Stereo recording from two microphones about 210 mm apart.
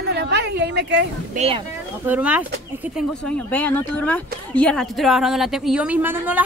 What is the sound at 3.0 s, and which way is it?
Speech, 5° left (ahead or behind).